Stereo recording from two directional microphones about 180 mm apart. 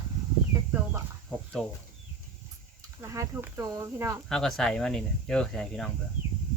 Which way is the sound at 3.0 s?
15° right (ahead or behind).